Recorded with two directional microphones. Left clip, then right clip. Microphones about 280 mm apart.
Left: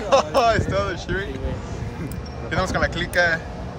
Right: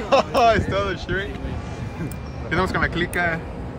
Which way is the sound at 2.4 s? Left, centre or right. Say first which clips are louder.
Right 1 dB; centre.